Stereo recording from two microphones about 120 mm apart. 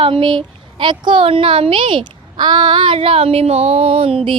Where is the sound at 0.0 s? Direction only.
45° right (ahead or behind).